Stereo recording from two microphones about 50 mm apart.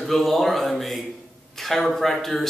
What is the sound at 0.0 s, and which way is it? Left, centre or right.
A man's voice, centre.